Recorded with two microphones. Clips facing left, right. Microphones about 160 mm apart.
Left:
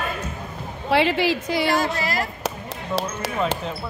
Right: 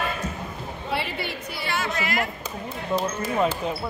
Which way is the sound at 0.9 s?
90° left.